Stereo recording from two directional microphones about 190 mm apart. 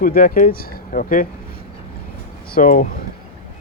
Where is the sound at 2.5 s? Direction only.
45° left (ahead or behind).